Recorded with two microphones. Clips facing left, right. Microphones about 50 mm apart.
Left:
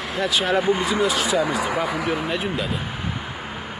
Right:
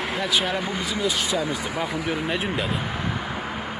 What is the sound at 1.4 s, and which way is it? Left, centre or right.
Speech, left.